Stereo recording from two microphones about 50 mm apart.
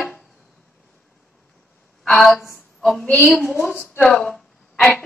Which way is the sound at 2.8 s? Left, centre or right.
Centre.